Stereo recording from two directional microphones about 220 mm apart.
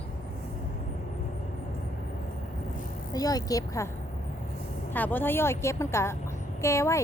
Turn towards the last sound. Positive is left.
turn(degrees=15)  # may be behind; listen again after turning